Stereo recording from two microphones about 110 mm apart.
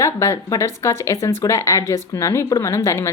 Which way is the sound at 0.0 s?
30° left (ahead or behind).